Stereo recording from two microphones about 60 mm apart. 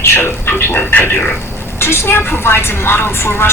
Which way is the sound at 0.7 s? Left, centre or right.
Left.